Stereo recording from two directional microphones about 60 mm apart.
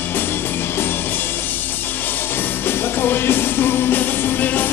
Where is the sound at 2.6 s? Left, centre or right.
Left.